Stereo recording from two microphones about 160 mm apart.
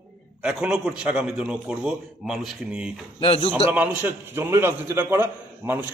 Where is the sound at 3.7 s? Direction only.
10° right (ahead or behind).